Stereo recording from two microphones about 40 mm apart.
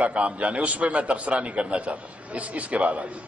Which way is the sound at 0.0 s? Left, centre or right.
Right.